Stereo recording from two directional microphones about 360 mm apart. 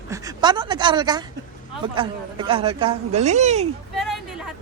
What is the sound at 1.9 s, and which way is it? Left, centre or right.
Speech, centre.